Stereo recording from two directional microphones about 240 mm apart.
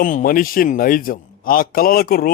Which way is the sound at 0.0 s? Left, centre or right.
Left.